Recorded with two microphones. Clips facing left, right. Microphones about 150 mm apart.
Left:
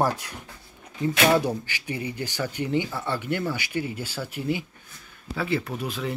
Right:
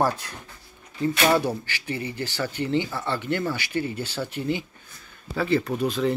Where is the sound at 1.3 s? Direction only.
15° left (ahead or behind).